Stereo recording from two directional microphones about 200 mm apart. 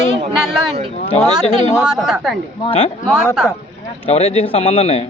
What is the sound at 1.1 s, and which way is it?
Speech, 30° left (ahead or behind).